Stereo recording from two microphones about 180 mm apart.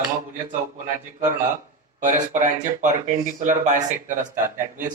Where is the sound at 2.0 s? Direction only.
45° right (ahead or behind).